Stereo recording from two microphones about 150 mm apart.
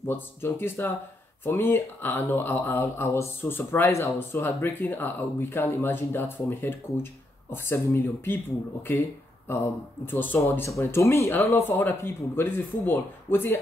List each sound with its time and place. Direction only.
0.1 s speech: 15° left (ahead or behind)
10.0 s speech: 15° left (ahead or behind)